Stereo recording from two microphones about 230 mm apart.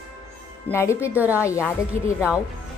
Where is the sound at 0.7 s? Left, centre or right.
Centre.